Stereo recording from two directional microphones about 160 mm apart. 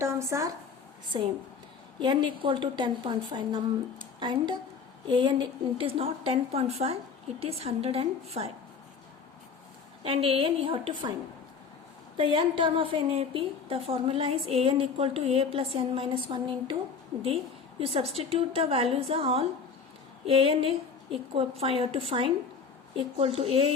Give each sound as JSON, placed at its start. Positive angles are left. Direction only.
{"t": 0.0, "sound": "a woman's voice", "side_deg": -20}
{"t": 1.1, "sound": "a woman's voice", "side_deg": -30}
{"t": 10.0, "sound": "a woman's voice", "side_deg": -35}
{"t": 12.1, "sound": "a woman's voice", "side_deg": -30}
{"t": 17.7, "sound": "a woman's voice", "side_deg": -40}